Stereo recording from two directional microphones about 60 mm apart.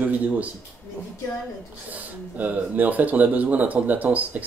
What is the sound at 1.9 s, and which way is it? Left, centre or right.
Speech, right.